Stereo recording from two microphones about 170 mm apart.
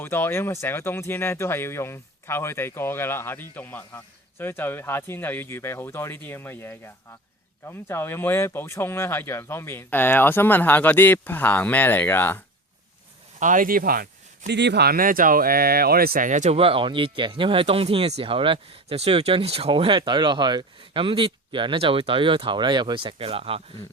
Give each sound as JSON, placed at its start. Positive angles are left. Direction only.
{"t": 0.0, "sound": "speech", "side_deg": 10}
{"t": 13.4, "sound": "speech", "side_deg": -50}
{"t": 16.6, "sound": "speech", "side_deg": -30}